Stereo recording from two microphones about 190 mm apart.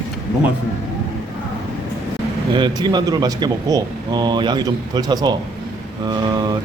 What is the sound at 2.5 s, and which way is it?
Speech, 25° right (ahead or behind).